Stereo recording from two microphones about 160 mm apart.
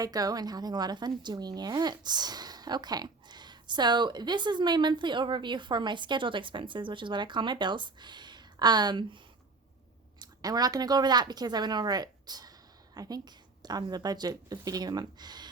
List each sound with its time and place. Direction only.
0.0 s a woman's voice: 25° right (ahead or behind)
10.2 s speech: 25° right (ahead or behind)